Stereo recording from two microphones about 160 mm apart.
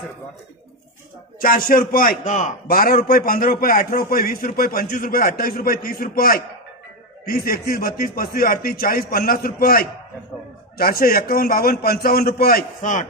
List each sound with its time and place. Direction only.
1.4 s a man's voice: 60° left (ahead or behind)